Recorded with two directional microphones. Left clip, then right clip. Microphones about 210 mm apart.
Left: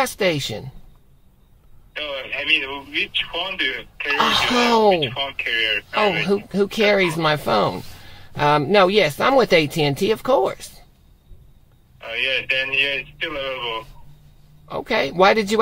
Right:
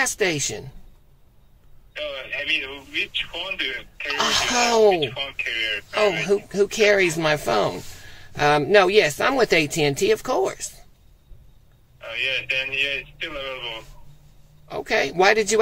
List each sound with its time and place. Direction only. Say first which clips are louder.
0.0 s speech: left 2 dB; 10° left (ahead or behind)
2.0 s speech: left 2 dB; 25° left (ahead or behind)
6.2 s speech: even; 10° left (ahead or behind)
12.0 s speech: left 3 dB; 25° left (ahead or behind)
14.7 s speech: left 1 dB; 5° left (ahead or behind)